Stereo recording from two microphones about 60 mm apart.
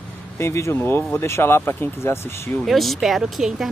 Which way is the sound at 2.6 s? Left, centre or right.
Centre.